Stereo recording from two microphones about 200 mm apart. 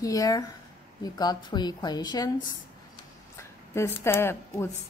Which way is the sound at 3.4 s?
15° left (ahead or behind).